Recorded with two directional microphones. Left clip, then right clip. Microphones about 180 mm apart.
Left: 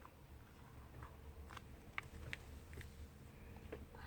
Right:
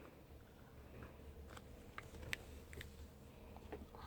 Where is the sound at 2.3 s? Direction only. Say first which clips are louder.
Right 4 dB; 65° right (ahead or behind).